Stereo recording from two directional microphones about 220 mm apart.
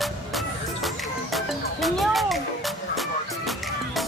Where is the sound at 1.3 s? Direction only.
Centre (ahead or behind).